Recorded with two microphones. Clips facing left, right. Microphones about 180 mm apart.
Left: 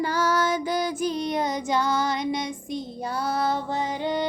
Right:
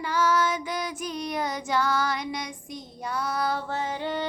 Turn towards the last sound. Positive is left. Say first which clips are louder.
# left 3 dB
turn(degrees=15)  # may be behind; listen again after turning